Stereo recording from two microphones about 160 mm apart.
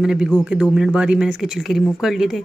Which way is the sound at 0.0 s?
5° right (ahead or behind).